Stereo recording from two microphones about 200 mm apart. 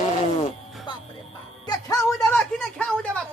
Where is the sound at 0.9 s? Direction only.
25° left (ahead or behind).